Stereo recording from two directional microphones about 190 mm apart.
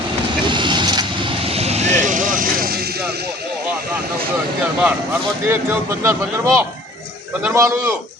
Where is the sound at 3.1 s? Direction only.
55° right (ahead or behind).